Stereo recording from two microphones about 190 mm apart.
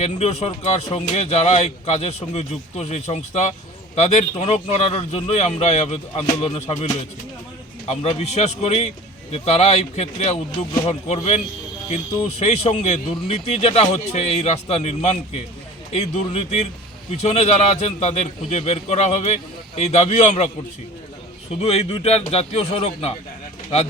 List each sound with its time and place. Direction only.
0.0 s speech: 35° left (ahead or behind)
21.6 s speech: 35° left (ahead or behind)